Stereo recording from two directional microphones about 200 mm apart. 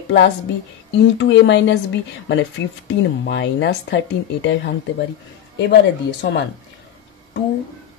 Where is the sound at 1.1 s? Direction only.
65° left (ahead or behind).